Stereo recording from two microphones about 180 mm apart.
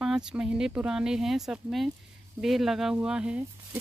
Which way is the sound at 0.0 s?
5° right (ahead or behind).